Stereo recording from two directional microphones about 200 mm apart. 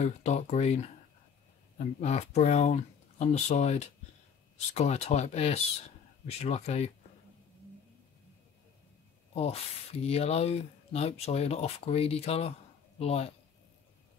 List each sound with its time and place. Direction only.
0.0 s speech: 35° left (ahead or behind)
9.3 s speech: 30° left (ahead or behind)